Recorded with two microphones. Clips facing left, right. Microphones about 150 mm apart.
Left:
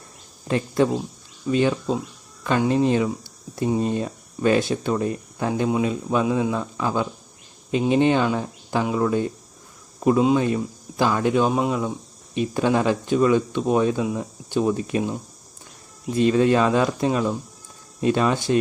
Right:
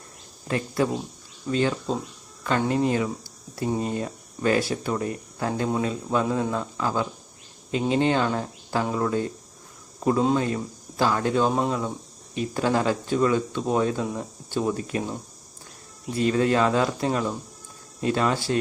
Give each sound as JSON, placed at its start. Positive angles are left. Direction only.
{"t": 0.4, "sound": "speech", "side_deg": 25}
{"t": 16.1, "sound": "speech", "side_deg": 20}